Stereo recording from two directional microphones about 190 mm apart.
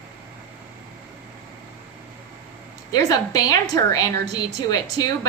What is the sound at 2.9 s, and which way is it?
A woman's voice, 20° left (ahead or behind).